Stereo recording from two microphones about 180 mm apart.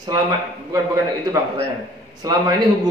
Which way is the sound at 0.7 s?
15° right (ahead or behind).